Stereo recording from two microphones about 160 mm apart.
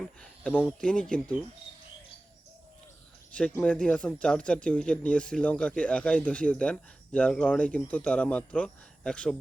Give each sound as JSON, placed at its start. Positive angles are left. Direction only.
{"t": 0.0, "sound": "speech", "side_deg": 5}
{"t": 3.5, "sound": "speech", "side_deg": 5}